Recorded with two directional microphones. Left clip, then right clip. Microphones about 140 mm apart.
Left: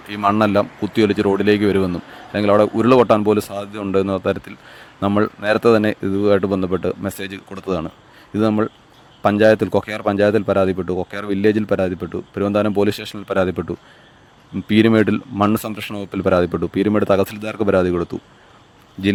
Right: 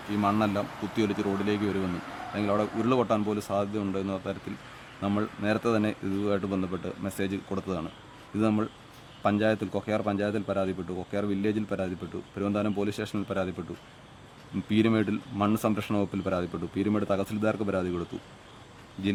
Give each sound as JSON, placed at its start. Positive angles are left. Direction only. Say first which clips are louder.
{"t": 0.1, "sound": "speech", "louder": "left 11 dB", "side_deg": 65}
{"t": 14.7, "sound": "speech", "louder": "left 12 dB", "side_deg": 60}